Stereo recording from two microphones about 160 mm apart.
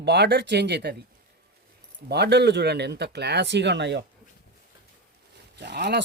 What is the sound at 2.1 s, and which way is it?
Speech, 90° right.